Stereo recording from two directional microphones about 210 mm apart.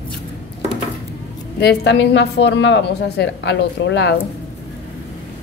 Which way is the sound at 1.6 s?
50° left (ahead or behind).